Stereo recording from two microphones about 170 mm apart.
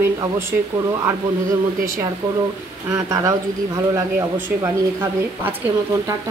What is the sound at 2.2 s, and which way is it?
Speech, 25° right (ahead or behind).